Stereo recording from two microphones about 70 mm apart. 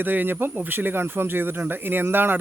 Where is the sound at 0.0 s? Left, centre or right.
Right.